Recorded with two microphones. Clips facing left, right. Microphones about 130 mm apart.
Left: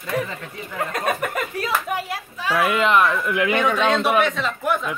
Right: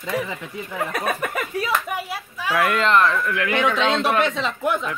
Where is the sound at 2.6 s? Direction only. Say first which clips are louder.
Even; 5° left (ahead or behind).